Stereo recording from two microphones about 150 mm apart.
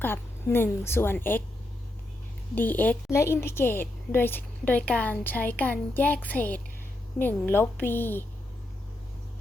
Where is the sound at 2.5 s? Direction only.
10° left (ahead or behind).